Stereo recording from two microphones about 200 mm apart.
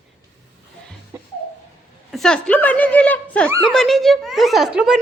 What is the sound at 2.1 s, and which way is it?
Speech, centre (ahead or behind).